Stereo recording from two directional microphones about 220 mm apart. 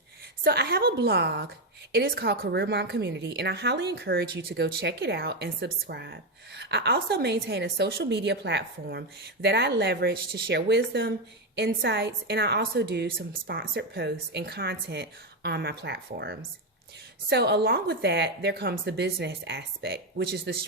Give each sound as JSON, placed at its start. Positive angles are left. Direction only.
{"t": 0.4, "sound": "a woman's voice", "side_deg": -45}